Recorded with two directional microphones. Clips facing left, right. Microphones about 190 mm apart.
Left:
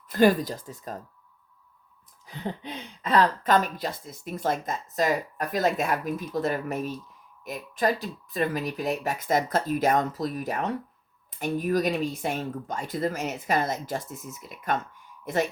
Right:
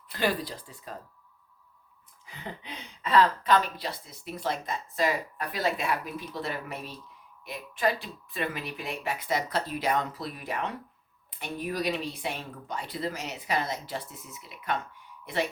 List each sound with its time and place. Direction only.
0.1 s speech: 45° left (ahead or behind)
2.2 s speech: 40° left (ahead or behind)